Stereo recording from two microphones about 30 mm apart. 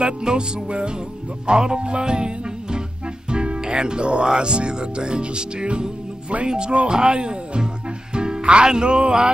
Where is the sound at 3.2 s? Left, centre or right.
Right.